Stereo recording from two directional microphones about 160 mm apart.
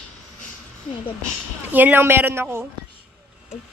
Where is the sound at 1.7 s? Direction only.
10° right (ahead or behind).